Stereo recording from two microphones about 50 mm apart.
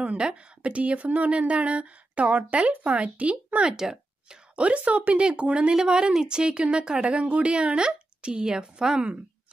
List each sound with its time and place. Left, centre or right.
0.0 s speech: right
3.7 s speech: centre